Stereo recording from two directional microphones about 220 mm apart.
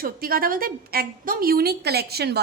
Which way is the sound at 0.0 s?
40° right (ahead or behind).